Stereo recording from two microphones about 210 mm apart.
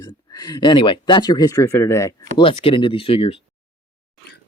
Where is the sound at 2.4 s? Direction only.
25° left (ahead or behind).